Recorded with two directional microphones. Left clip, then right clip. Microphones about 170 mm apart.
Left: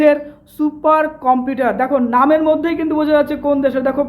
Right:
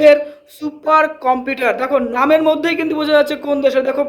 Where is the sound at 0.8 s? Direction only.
15° right (ahead or behind).